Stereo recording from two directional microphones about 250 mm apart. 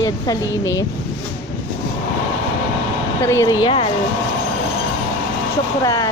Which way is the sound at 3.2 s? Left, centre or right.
Centre.